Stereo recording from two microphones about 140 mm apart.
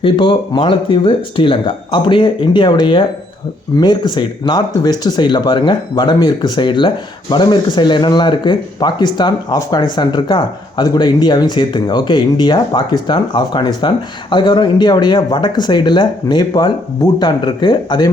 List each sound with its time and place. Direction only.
0.0 s speech: 35° left (ahead or behind)